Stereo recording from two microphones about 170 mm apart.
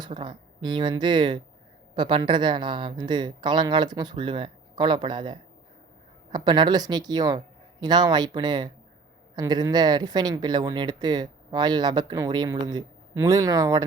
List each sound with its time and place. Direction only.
0.0 s speech: 30° right (ahead or behind)